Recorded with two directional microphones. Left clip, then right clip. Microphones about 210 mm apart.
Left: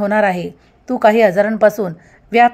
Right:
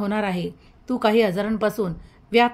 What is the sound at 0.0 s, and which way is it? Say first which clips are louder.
A woman's voice: left 10 dB; 20° left (ahead or behind).